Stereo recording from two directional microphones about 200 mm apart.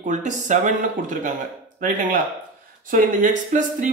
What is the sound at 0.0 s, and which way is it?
Speech, 40° right (ahead or behind).